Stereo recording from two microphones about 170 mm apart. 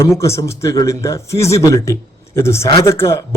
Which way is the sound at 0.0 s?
15° left (ahead or behind).